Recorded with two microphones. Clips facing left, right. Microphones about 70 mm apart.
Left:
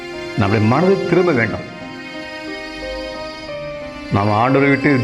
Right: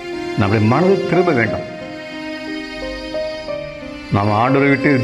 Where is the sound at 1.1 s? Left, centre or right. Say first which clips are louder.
Left 1 dB; centre.